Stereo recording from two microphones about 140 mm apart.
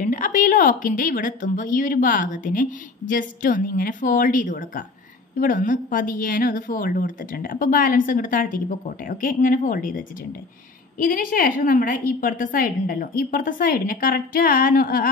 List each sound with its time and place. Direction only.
0.0 s a woman's voice: 65° left (ahead or behind)
11.0 s a woman's voice: 85° left